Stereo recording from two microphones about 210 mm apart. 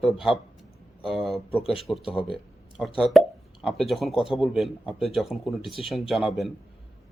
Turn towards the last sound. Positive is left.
turn(degrees=0)  # may be behind; listen again after turning